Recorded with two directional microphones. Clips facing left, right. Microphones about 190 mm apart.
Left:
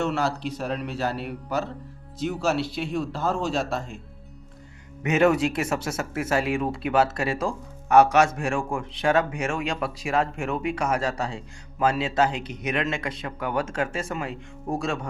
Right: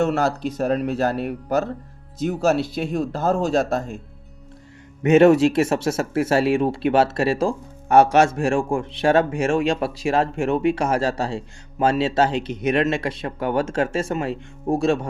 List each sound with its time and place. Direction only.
0.0 s speech: 45° right (ahead or behind)
5.0 s a man's voice: 25° right (ahead or behind)